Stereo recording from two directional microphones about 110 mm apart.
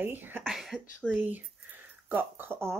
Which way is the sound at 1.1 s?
15° right (ahead or behind).